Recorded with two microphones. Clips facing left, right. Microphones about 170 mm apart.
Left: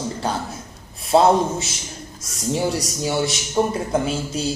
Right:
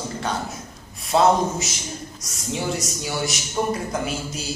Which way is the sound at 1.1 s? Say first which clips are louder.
Left 3 dB; 30° left (ahead or behind).